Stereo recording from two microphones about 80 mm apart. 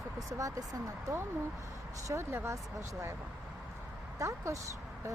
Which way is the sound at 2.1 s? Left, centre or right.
Right.